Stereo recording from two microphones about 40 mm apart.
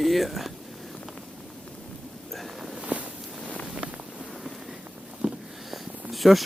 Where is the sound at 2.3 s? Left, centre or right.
Centre.